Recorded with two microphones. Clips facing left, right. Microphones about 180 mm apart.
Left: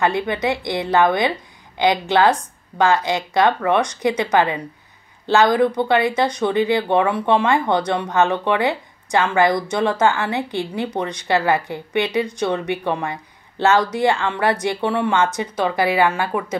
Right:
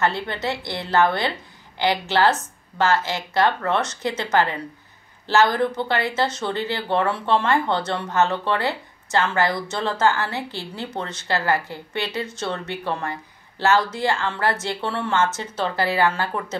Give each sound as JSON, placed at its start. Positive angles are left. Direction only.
{"t": 0.0, "sound": "speech", "side_deg": 15}